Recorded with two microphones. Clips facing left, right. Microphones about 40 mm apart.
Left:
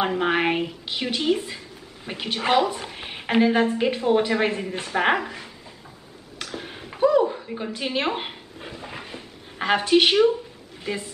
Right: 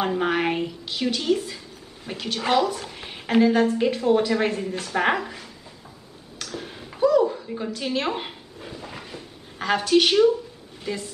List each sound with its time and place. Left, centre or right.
0.0 s a woman's voice: centre
6.3 s a sound: left
10.8 s speech: left